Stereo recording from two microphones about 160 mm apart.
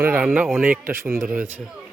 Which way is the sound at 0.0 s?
10° right (ahead or behind).